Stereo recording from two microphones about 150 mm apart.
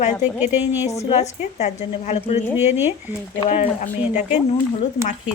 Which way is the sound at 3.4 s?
40° left (ahead or behind).